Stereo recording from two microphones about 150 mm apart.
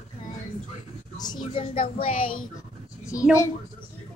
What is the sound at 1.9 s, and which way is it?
Child singing, 40° left (ahead or behind).